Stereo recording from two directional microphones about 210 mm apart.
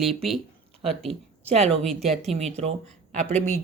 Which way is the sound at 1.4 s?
30° right (ahead or behind).